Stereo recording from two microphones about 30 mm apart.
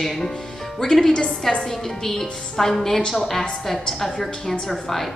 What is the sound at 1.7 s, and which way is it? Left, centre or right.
A woman's voice, centre.